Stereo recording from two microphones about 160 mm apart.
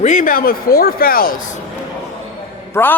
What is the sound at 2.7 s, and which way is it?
Speech, 10° left (ahead or behind).